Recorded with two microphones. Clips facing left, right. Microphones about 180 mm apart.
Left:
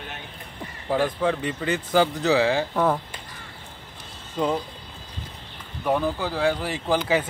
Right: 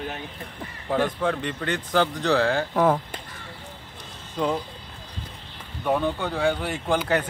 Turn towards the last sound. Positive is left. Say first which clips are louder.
# left 1 dB
turn(degrees=5)  # may be behind; listen again after turning